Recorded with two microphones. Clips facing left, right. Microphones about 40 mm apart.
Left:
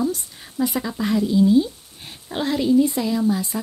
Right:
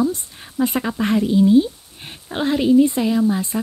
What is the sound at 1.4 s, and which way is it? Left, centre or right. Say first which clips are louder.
Speech: right 3 dB; right.